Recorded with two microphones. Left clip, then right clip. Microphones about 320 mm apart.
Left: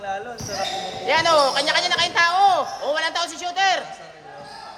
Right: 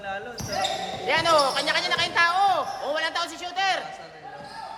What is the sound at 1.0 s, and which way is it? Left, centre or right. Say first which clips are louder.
A man's voice: left 4 dB; left.